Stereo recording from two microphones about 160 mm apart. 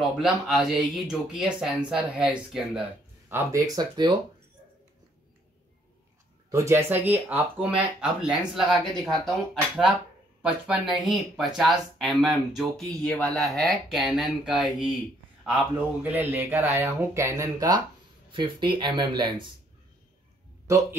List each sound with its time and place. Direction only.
0.2 s speech: centre (ahead or behind)
3.3 s speech: 15° right (ahead or behind)
6.5 s speech: 15° right (ahead or behind)